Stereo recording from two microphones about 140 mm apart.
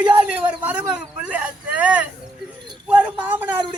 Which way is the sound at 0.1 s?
10° right (ahead or behind).